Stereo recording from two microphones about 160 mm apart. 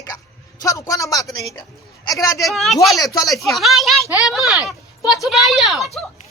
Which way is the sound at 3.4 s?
Centre (ahead or behind).